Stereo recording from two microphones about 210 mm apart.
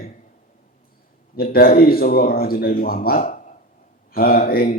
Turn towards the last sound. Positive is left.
turn(degrees=45)  # may be behind; listen again after turning